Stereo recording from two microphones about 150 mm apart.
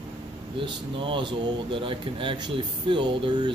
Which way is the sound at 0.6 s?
35° right (ahead or behind).